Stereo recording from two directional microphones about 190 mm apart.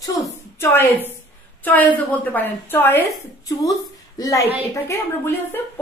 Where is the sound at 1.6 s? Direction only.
10° left (ahead or behind).